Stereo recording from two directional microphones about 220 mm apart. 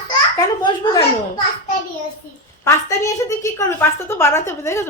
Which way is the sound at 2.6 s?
15° left (ahead or behind).